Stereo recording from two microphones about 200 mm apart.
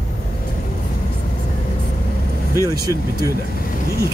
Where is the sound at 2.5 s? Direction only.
15° right (ahead or behind).